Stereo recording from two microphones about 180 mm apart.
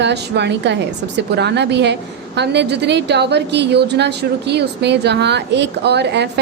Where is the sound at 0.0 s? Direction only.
70° right (ahead or behind).